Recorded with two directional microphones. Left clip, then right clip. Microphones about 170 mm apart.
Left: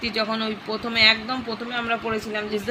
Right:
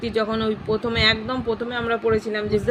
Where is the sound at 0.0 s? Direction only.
50° right (ahead or behind).